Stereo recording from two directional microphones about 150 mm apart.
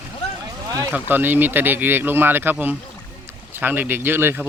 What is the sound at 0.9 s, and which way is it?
Speech, 10° right (ahead or behind).